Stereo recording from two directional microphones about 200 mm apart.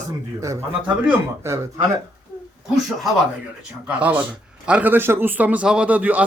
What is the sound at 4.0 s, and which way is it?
A man's voice, 5° right (ahead or behind).